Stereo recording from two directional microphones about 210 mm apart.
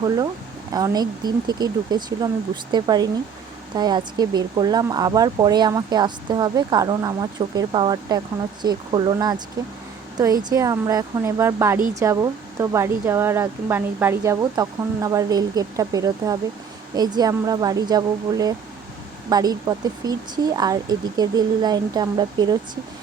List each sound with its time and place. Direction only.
0.7 s speech: 20° right (ahead or behind)
10.5 s speech: 15° right (ahead or behind)